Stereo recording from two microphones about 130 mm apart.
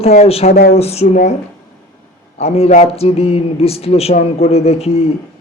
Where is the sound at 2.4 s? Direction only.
55° left (ahead or behind).